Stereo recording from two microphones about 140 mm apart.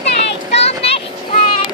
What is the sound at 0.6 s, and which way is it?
Vehicle, 45° left (ahead or behind).